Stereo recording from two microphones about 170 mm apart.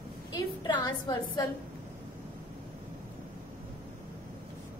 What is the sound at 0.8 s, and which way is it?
Speech, 25° left (ahead or behind).